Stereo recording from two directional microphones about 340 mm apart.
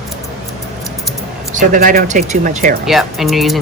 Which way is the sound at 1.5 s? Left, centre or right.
Right.